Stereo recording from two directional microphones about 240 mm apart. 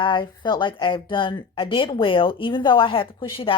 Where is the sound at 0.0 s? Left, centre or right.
Centre.